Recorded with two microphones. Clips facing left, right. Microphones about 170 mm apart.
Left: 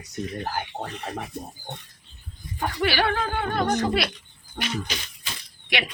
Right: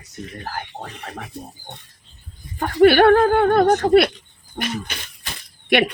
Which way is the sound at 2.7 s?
55° right (ahead or behind).